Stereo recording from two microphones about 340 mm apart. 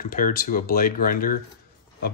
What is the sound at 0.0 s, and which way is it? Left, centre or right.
Speech, left.